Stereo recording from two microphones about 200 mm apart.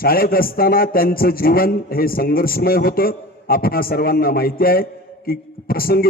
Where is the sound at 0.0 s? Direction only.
50° left (ahead or behind).